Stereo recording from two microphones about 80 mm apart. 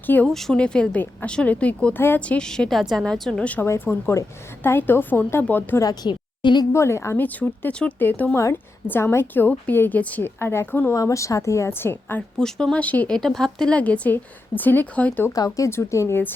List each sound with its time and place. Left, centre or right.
0.3 s a woman's voice: centre
2.0 s a woman's voice: left
2.2 s a woman's voice: centre
3.7 s a woman's voice: left
5.8 s a woman's voice: left
6.7 s a woman's voice: left
7.2 s a woman's voice: left
10.9 s a woman's voice: left
12.4 s a woman's voice: centre
13.1 s a woman's voice: centre
15.3 s a woman's voice: left